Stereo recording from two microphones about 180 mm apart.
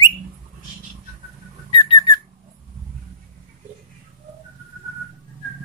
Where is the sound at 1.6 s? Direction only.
25° left (ahead or behind).